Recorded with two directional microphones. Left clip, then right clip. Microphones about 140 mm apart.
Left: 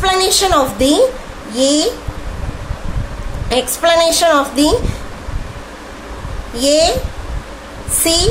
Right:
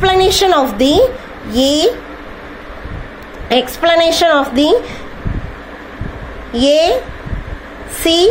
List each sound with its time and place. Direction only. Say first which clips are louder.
0.0 s a woman's voice: right 3 dB; 20° right (ahead or behind)
3.4 s a woman's voice: right 1 dB; 25° right (ahead or behind)
6.5 s a woman's voice: right 2 dB; 30° right (ahead or behind)
8.0 s speech: right 4 dB; 30° right (ahead or behind)